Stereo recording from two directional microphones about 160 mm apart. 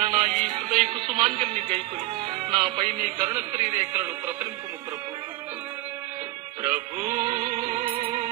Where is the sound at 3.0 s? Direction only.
50° right (ahead or behind).